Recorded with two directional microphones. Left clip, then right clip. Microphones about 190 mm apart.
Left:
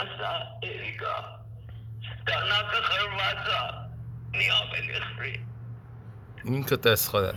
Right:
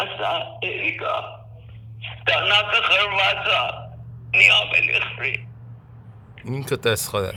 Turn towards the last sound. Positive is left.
turn(degrees=-15)  # may be behind; listen again after turning